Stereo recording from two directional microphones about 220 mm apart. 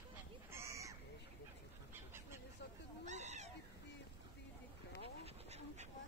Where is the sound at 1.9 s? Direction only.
10° right (ahead or behind).